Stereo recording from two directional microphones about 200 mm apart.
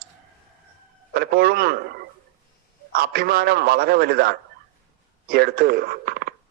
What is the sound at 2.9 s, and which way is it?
A man's voice, 50° right (ahead or behind).